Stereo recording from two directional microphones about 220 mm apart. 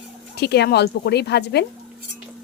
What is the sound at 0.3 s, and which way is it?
A woman's voice, 50° left (ahead or behind).